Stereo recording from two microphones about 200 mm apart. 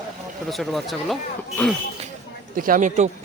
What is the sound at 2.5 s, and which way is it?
Speech, 45° right (ahead or behind).